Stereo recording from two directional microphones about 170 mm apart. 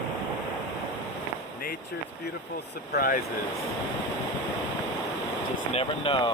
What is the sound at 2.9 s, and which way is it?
Speech, 60° left (ahead or behind).